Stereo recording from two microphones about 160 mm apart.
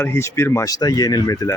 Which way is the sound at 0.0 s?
15° left (ahead or behind).